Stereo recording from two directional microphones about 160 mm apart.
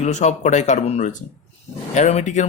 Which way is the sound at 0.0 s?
45° left (ahead or behind).